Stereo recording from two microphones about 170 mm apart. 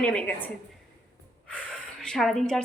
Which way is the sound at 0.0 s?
10° left (ahead or behind).